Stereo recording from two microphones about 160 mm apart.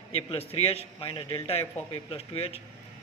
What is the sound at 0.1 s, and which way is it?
A man's voice, 40° left (ahead or behind).